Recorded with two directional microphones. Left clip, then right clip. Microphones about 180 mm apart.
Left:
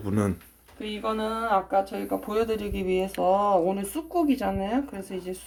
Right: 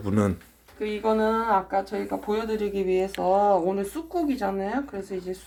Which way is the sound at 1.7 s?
35° left (ahead or behind).